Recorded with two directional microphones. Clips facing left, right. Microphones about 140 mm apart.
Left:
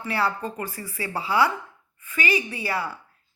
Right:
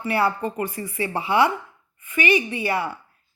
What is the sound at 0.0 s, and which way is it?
A woman's voice, 25° right (ahead or behind).